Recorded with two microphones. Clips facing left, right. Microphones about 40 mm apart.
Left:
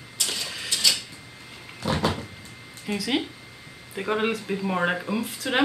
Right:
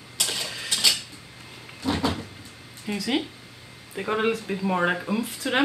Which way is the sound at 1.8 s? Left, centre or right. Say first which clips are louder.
Even; left.